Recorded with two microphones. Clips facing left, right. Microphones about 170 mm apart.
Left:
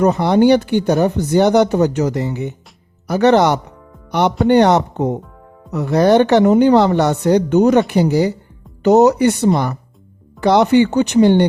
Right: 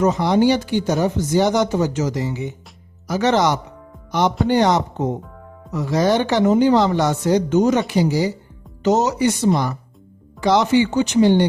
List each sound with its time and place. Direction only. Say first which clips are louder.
0.0 s speech: left 4 dB; 60° left (ahead or behind)